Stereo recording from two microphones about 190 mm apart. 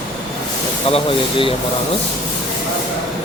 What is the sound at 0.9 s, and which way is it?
Speech, 30° left (ahead or behind).